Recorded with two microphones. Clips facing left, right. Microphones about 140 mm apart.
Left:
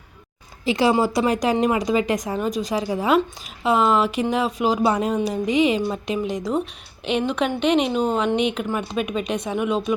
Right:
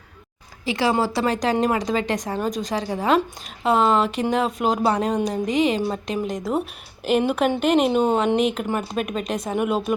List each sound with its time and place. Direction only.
0.6 s a woman's voice: 25° left (ahead or behind); by 9.9 s 5° right (ahead or behind)